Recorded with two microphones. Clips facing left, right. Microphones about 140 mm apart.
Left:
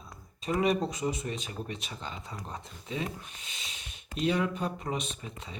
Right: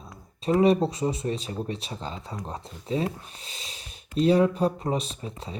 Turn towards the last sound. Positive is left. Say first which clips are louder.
# right 5 dB
turn(degrees=-35)  # may be behind; listen again after turning